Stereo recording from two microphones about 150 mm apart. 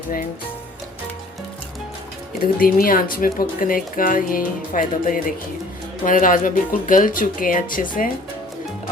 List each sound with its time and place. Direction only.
2.4 s speech: 70° left (ahead or behind)